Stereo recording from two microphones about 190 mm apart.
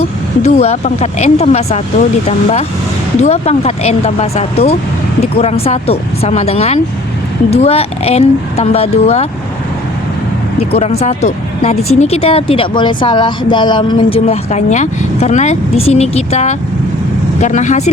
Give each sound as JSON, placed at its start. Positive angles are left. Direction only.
{"t": 0.4, "sound": "speech", "side_deg": 35}
{"t": 10.6, "sound": "speech", "side_deg": 35}